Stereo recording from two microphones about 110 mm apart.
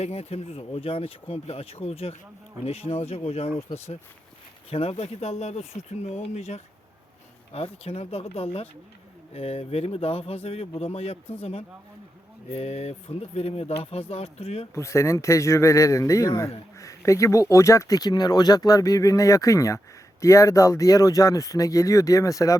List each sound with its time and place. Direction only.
0.0 s speech: 70° left (ahead or behind); by 6.6 s 90° left
7.5 s speech: 65° left (ahead or behind)
12.5 s speech: 70° left (ahead or behind)
14.8 s speech: 25° left (ahead or behind)